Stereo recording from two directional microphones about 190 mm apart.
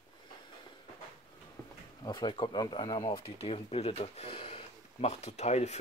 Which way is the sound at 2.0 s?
25° left (ahead or behind).